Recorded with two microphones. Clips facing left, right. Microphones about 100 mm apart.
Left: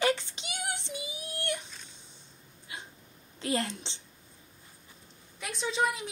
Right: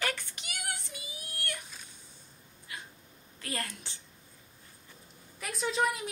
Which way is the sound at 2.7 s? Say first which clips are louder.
Left 1 dB; 25° left (ahead or behind).